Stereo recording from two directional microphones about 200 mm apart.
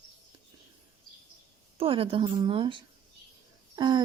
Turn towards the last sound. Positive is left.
turn(degrees=-20)  # may be behind; listen again after turning